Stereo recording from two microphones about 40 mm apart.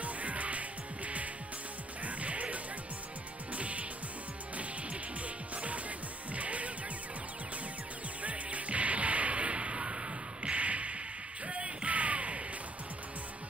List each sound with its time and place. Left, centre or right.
0.0 s music: right
5.2 s music: right
8.2 s music: right